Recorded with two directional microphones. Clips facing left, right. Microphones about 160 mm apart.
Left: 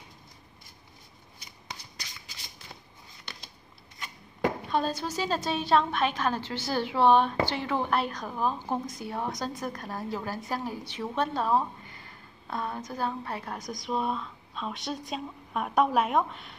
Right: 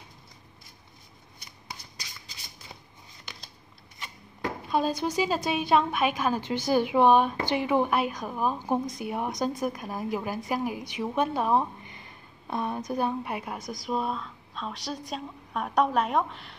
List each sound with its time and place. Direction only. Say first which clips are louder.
4.6 s a woman's voice: right 2 dB; 10° right (ahead or behind)